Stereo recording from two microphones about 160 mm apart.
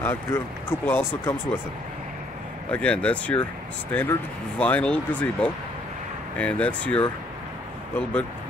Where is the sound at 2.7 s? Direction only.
5° left (ahead or behind).